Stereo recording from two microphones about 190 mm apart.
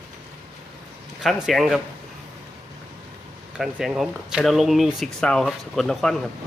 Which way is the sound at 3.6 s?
5° right (ahead or behind).